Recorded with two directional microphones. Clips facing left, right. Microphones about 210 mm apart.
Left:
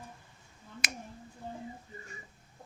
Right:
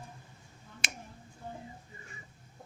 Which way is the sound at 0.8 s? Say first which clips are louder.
Left 1 dB; 25° right (ahead or behind).